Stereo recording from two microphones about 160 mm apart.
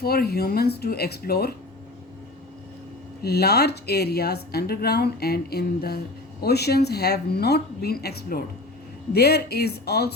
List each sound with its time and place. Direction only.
0.0 s speech: 75° left (ahead or behind)
3.2 s speech: 90° left